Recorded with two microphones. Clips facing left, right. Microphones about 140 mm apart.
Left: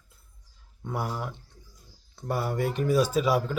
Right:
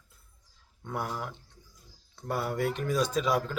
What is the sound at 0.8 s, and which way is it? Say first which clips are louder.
Speech: left 2 dB; 5° left (ahead or behind).